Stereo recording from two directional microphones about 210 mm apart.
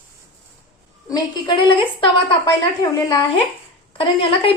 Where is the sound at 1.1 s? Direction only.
20° left (ahead or behind).